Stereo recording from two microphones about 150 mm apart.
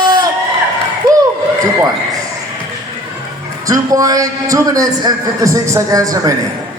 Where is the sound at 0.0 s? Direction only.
25° right (ahead or behind).